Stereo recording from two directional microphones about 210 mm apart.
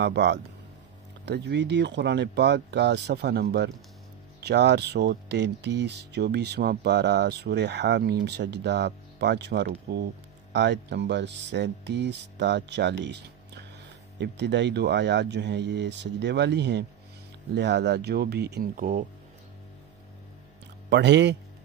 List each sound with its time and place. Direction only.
0.0 s speech: 55° right (ahead or behind)
20.9 s speech: 55° right (ahead or behind)